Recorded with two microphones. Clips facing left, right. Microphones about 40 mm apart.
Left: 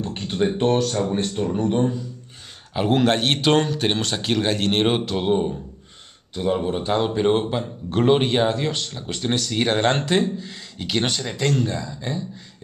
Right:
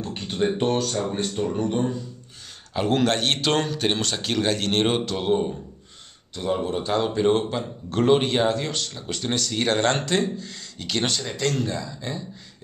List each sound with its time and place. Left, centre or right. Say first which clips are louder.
0.0 s speech: left 2 dB; centre